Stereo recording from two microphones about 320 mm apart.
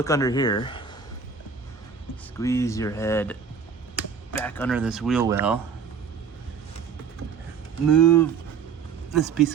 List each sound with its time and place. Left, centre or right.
0.0 s speech: centre
2.4 s speech: centre
7.9 s speech: centre